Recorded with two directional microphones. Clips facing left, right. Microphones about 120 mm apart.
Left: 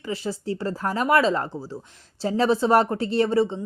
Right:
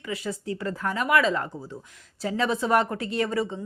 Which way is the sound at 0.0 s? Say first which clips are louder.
Left 3 dB; 30° left (ahead or behind).